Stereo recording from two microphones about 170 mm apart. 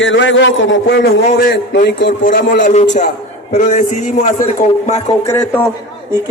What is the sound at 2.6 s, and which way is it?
A man's voice, 45° left (ahead or behind).